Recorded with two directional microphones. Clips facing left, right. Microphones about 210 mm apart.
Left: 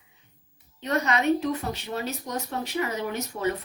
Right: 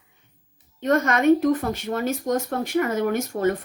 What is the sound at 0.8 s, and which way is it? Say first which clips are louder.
A woman's voice: right 5 dB; 50° right (ahead or behind).